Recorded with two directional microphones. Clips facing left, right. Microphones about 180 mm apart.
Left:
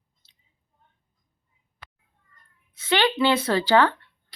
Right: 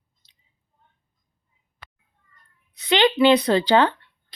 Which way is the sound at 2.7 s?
20° right (ahead or behind).